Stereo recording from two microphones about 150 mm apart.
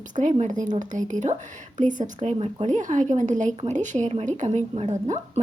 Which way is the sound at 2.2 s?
45° right (ahead or behind).